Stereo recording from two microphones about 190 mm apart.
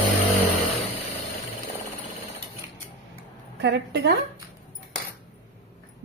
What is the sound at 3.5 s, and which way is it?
Speech, 65° right (ahead or behind).